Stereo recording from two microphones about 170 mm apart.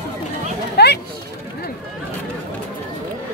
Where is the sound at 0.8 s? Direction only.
75° left (ahead or behind).